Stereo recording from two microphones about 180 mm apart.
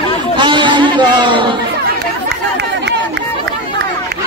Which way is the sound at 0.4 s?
25° right (ahead or behind).